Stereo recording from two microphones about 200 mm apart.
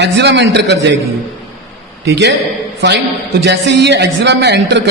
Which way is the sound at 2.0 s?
60° right (ahead or behind).